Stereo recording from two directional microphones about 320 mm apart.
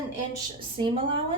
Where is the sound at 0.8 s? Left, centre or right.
Centre.